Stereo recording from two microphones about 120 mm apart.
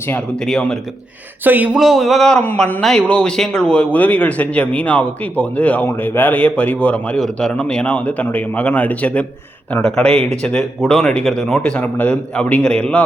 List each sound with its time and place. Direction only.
0.4 s speech: 5° left (ahead or behind)
1.5 s speech: 15° right (ahead or behind); by 13.1 s 10° left (ahead or behind)